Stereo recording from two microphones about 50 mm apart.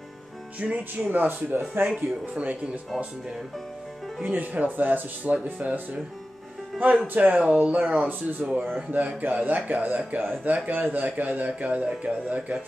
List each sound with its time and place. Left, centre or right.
0.6 s speech: right
0.9 s a man's voice: right
2.0 s speech: right
4.4 s a man's voice: right
7.2 s a man's voice: right
8.4 s speech: centre
8.9 s a man's voice: right